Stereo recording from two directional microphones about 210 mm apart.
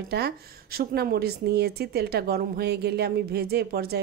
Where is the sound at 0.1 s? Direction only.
45° right (ahead or behind).